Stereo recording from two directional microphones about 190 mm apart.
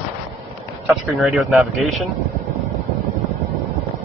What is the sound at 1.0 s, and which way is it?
Speech, centre (ahead or behind).